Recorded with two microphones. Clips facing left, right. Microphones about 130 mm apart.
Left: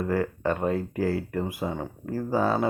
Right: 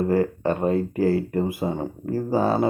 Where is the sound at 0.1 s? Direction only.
30° right (ahead or behind).